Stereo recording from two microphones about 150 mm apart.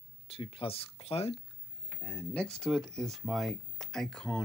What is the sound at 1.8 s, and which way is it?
Speech, 15° left (ahead or behind).